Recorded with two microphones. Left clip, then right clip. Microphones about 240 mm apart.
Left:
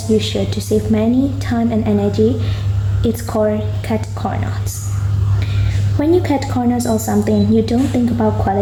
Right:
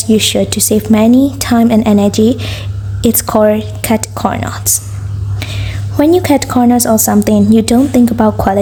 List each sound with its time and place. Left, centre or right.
0.2 s a woman's voice: right
6.0 s a woman's voice: right